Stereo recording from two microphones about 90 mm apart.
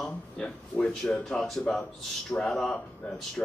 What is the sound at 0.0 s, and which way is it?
Speech, 10° left (ahead or behind).